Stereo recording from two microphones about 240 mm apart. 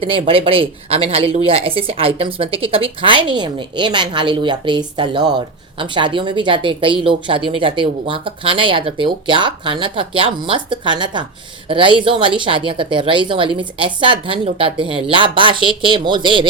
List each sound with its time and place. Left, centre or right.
0.0 s speech: right